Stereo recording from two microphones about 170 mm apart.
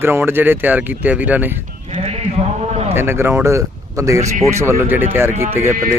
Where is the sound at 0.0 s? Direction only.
15° right (ahead or behind).